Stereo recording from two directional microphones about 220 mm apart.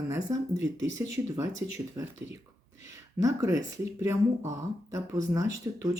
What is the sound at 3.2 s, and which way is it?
Speech, 15° right (ahead or behind).